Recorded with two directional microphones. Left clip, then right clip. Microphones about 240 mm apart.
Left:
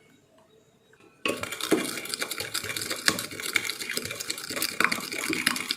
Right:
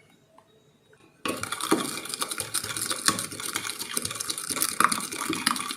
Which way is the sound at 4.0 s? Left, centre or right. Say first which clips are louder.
Right 1 dB; centre.